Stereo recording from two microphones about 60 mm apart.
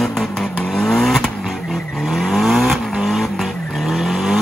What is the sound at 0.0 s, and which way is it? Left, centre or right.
Vehicle, centre.